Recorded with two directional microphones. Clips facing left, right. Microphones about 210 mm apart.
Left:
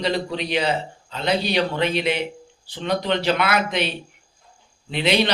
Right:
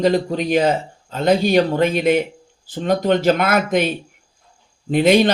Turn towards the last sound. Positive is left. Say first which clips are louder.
# right 7 dB
turn(degrees=-50)  # may be behind; listen again after turning